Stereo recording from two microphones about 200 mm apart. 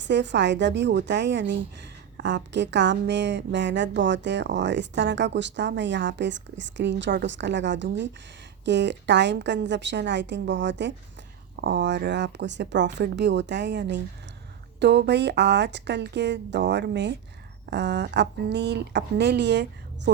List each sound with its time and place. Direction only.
0.0 s speech: 60° right (ahead or behind)